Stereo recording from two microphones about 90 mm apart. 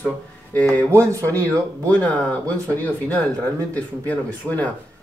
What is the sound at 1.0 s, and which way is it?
Speech, 35° right (ahead or behind).